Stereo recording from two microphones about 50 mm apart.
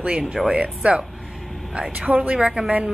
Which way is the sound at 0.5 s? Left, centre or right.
Right.